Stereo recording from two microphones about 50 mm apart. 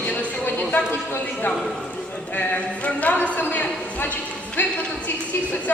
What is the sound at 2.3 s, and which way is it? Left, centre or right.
A man's voice, left.